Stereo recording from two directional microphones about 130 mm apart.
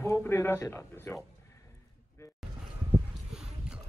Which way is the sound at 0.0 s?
15° left (ahead or behind).